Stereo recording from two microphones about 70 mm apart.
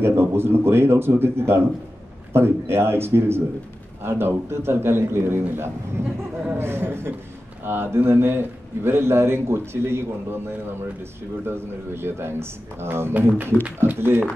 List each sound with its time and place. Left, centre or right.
0.0 s a man's voice: right